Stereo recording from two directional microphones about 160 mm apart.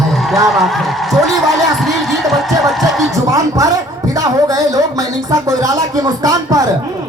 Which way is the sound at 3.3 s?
20° right (ahead or behind).